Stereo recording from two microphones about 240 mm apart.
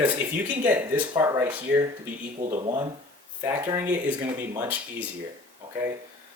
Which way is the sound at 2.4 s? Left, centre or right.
Right.